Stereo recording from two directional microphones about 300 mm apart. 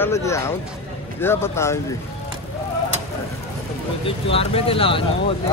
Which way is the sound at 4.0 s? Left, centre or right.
Centre.